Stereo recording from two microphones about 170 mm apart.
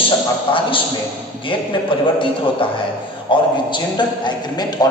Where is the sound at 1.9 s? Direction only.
30° left (ahead or behind).